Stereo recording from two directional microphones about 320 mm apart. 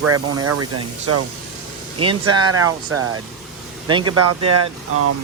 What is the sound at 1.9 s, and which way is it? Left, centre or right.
Speech, centre.